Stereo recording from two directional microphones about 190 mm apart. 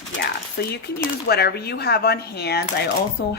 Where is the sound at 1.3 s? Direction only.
55° left (ahead or behind).